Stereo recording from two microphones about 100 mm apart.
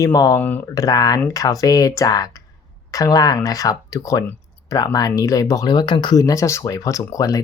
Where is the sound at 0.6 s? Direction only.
35° left (ahead or behind).